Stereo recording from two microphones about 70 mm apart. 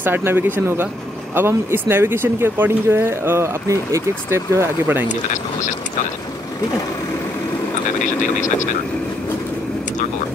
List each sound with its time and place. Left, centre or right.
0.0 s speech: right